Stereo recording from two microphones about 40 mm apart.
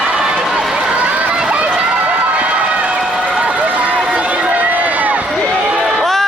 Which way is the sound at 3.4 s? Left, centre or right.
Right.